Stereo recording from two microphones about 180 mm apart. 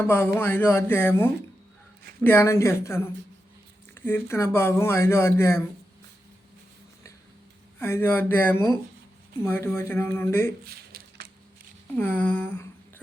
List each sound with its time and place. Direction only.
0.0 s speech: 10° left (ahead or behind)
7.8 s speech: 15° left (ahead or behind)
10.7 s squish: 60° right (ahead or behind)
11.9 s speech: 10° left (ahead or behind)